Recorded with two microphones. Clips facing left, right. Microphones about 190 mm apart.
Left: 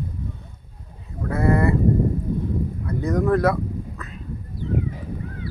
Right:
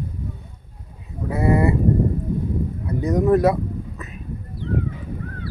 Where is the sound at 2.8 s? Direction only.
20° right (ahead or behind).